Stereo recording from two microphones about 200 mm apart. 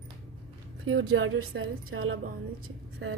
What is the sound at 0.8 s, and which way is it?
A woman's voice, 75° right (ahead or behind).